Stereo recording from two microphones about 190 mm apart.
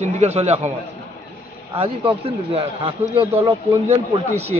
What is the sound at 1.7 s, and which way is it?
Speech, 30° right (ahead or behind).